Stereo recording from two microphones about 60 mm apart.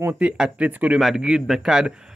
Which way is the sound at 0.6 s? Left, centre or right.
Right.